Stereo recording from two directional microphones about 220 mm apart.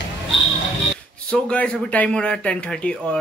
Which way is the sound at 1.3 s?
5° left (ahead or behind).